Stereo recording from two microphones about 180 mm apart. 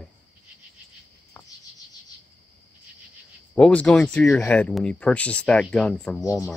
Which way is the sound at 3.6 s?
5° left (ahead or behind).